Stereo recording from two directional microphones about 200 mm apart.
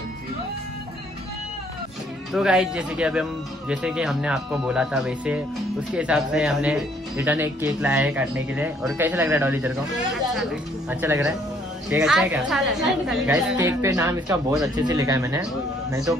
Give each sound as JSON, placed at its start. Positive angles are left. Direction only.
{"t": 2.3, "sound": "speech", "side_deg": -5}
{"t": 13.6, "sound": "speech", "side_deg": -15}